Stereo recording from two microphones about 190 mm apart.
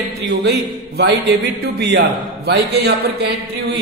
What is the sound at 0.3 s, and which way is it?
A man's voice, 65° right (ahead or behind).